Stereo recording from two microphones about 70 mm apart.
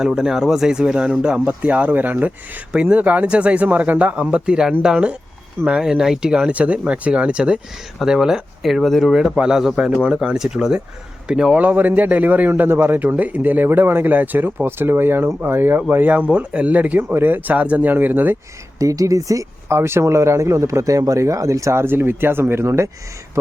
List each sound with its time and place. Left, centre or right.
0.0 s a man's voice: centre
11.6 s a man's voice: right
18.8 s speech: right
19.7 s speech: right